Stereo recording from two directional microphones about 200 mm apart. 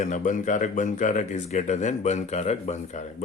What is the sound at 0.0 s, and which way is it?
Speech, 40° left (ahead or behind).